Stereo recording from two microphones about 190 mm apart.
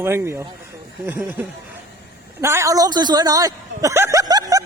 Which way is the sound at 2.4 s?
15° right (ahead or behind).